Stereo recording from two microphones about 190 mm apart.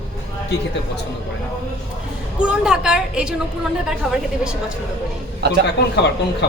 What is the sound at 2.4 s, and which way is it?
A woman's voice, 5° right (ahead or behind).